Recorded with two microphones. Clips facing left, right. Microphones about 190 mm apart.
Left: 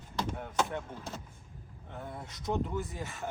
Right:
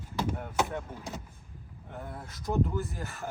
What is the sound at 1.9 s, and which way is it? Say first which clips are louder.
Speech: right 1 dB; centre (ahead or behind).